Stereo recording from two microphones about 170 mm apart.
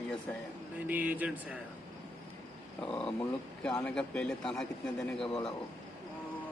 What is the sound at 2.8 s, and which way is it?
Speech, 5° left (ahead or behind).